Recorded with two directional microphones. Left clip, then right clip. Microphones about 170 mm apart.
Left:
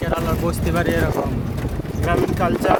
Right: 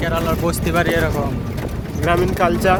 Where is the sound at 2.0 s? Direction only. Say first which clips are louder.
Right 3 dB; 50° right (ahead or behind).